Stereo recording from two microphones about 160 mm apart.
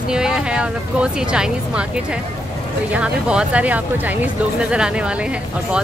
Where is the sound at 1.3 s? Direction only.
5° right (ahead or behind).